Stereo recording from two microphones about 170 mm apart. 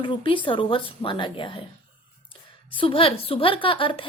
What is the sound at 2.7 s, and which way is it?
A woman's voice, 30° left (ahead or behind).